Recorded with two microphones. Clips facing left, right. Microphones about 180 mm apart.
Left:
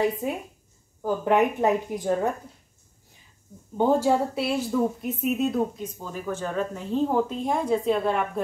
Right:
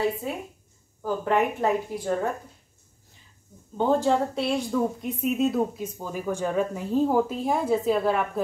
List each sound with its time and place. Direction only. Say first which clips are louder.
0.2 s a woman's voice: left 3 dB; 20° left (ahead or behind)
3.7 s a woman's voice: left 1 dB; 10° left (ahead or behind)